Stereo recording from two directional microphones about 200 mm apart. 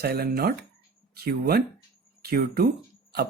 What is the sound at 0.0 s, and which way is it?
Speech, 50° right (ahead or behind).